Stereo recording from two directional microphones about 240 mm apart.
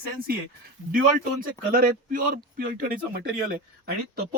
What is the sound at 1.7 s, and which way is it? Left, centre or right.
A man's voice, right.